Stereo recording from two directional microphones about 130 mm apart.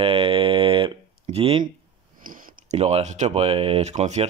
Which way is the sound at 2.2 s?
90° right.